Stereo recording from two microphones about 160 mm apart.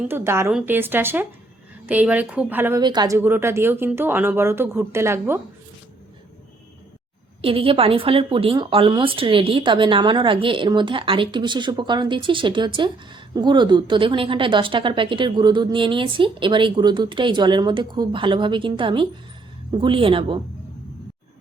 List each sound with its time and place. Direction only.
0.1 s speech: 15° right (ahead or behind)
2.8 s speech: 25° right (ahead or behind)
3.2 s speech: 15° right (ahead or behind)
7.4 s a woman's voice: 35° right (ahead or behind)